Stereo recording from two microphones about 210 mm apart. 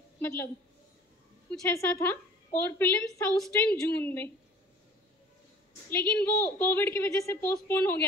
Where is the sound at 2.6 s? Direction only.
5° left (ahead or behind).